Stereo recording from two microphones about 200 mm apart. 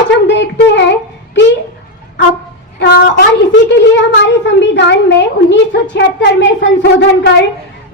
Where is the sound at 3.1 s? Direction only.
65° left (ahead or behind).